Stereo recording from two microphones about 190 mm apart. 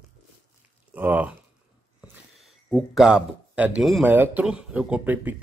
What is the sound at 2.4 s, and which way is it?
A man's voice, centre (ahead or behind).